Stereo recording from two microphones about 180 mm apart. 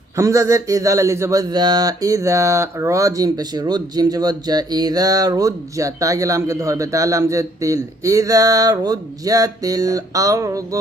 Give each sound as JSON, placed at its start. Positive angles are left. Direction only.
{"t": 0.2, "sound": "speech", "side_deg": -15}